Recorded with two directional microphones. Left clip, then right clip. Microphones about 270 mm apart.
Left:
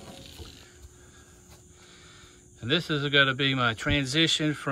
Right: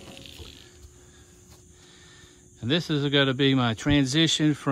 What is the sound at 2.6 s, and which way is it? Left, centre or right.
Speech, centre.